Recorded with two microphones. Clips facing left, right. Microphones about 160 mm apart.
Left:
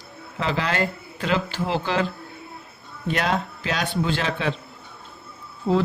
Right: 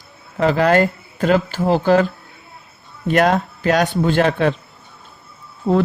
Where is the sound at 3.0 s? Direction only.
50° right (ahead or behind).